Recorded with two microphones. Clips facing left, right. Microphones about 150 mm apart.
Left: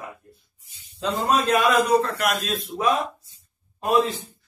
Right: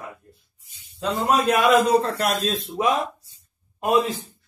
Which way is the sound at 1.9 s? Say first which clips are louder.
Right 1 dB; 30° right (ahead or behind).